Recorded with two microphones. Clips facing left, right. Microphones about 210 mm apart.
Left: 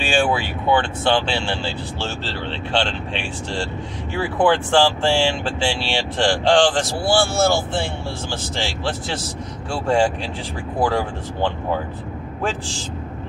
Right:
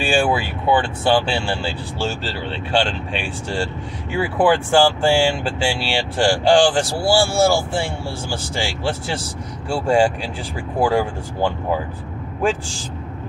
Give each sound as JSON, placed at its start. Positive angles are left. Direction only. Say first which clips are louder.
{"t": 0.1, "sound": "speech", "louder": "even", "side_deg": -10}
{"t": 2.7, "sound": "speech", "louder": "right 3 dB", "side_deg": -10}
{"t": 4.2, "sound": "speech", "louder": "right 1 dB", "side_deg": -10}